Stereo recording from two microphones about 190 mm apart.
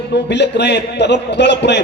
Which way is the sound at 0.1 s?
65° left (ahead or behind).